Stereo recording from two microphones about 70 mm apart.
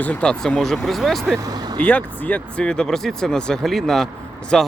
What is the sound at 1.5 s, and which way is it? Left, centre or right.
Vehicle, right.